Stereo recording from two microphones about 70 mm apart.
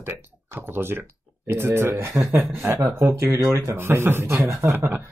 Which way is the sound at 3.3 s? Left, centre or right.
Right.